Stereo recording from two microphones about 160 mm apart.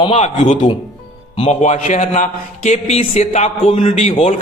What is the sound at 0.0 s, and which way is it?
A man's voice, 45° left (ahead or behind).